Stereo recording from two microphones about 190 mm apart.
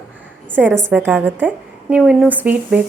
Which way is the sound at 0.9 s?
10° right (ahead or behind).